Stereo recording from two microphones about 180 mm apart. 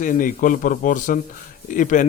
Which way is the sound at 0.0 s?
50° left (ahead or behind).